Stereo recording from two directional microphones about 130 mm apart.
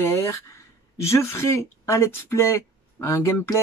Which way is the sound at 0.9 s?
20° left (ahead or behind).